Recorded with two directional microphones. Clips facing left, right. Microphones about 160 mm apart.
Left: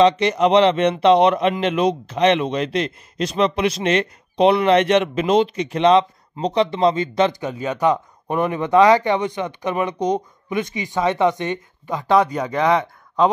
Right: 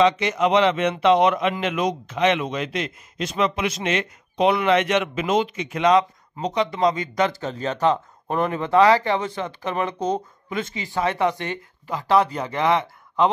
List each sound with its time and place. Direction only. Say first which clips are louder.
0.0 s speech: left 4 dB; 35° left (ahead or behind); by 13.3 s 15° left (ahead or behind)